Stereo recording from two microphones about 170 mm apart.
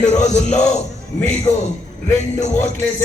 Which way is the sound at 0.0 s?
45° left (ahead or behind).